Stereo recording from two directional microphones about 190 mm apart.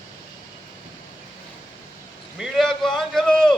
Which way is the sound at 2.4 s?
Centre (ahead or behind).